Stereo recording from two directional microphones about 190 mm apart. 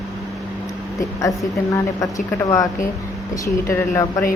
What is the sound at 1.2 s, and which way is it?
A woman's voice, 15° left (ahead or behind).